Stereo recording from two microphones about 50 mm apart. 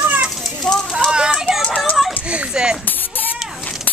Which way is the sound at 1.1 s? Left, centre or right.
Centre.